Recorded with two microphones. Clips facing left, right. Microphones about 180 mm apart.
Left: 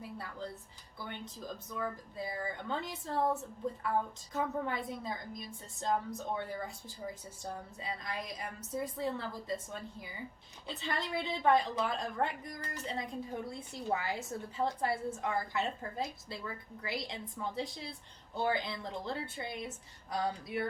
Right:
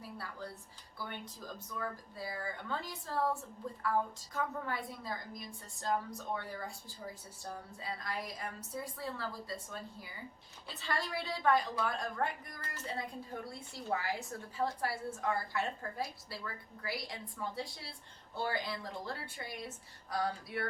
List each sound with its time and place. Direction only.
0.2 s a sound: 20° left (ahead or behind)
1.8 s a woman's voice: 20° left (ahead or behind)
4.4 s a woman's voice: 20° left (ahead or behind)
10.7 s a woman's voice: 20° left (ahead or behind)